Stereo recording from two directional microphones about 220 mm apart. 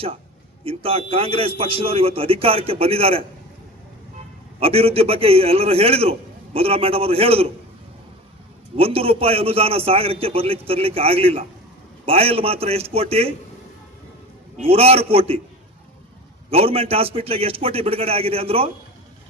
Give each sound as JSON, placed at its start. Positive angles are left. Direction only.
{"t": 0.6, "sound": "a man's voice", "side_deg": -25}
{"t": 4.6, "sound": "a man's voice", "side_deg": -25}
{"t": 8.7, "sound": "a man's voice", "side_deg": -25}
{"t": 14.6, "sound": "a man's voice", "side_deg": -25}
{"t": 16.5, "sound": "a man's voice", "side_deg": -25}